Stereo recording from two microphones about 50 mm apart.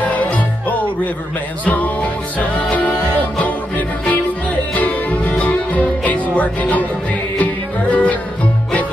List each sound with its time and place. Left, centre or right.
0.0 s music: left
7.9 s music: left